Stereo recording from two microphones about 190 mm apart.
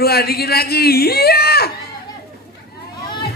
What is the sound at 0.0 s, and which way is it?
Speech, 55° left (ahead or behind).